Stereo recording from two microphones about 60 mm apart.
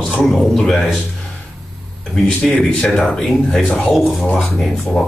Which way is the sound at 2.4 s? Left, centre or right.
Centre.